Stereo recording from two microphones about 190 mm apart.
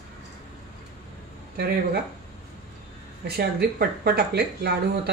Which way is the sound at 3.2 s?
55° right (ahead or behind).